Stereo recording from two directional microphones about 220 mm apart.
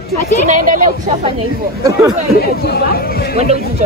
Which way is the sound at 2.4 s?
45° left (ahead or behind).